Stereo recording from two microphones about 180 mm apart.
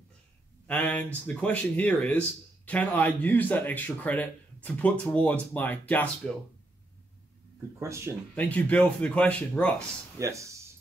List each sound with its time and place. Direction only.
0.7 s speech: 10° left (ahead or behind)
7.8 s speech: 15° right (ahead or behind)
8.4 s speech: 10° left (ahead or behind)
10.1 s speech: 15° right (ahead or behind)